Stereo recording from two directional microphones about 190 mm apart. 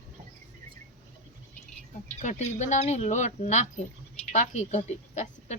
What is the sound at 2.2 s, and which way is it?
Speech, 40° left (ahead or behind).